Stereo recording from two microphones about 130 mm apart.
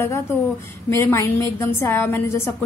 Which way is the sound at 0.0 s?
20° left (ahead or behind).